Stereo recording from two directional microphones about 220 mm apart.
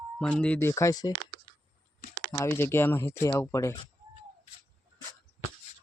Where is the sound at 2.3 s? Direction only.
10° left (ahead or behind).